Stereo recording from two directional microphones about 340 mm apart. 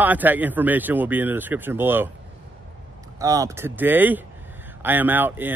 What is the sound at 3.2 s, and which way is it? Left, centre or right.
Speech, centre.